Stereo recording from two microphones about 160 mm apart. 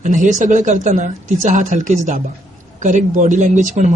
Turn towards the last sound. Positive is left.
turn(degrees=-50)  # may be behind; listen again after turning